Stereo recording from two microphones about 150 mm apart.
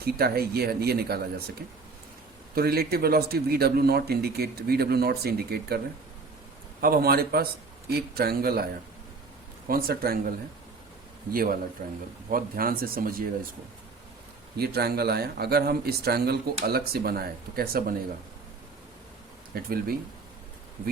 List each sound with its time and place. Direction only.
0.0 s a man's voice: 90° right
2.6 s a man's voice: 90° right
6.8 s a man's voice: 80° right
11.8 s speech: 50° right (ahead or behind)
12.3 s speech: 75° right (ahead or behind)
14.6 s a man's voice: 90° right
19.5 s speech: 90° right